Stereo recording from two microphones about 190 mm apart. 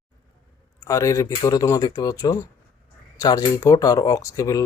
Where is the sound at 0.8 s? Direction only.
15° left (ahead or behind).